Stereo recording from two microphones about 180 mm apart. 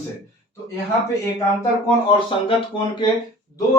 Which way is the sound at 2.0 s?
30° left (ahead or behind).